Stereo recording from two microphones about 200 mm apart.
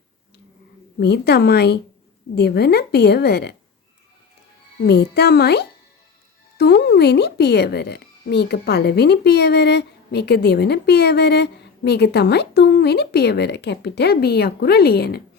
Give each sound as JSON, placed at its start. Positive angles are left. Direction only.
{"t": 0.9, "sound": "a woman's voice", "side_deg": 55}
{"t": 4.9, "sound": "a woman's voice", "side_deg": 55}